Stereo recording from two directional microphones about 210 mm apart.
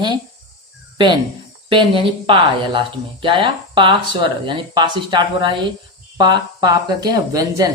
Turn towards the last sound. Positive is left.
turn(degrees=-20)  # may be behind; listen again after turning